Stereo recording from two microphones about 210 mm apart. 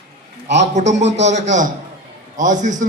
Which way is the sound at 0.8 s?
35° right (ahead or behind).